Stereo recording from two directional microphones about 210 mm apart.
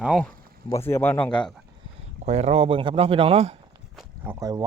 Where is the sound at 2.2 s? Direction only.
30° right (ahead or behind).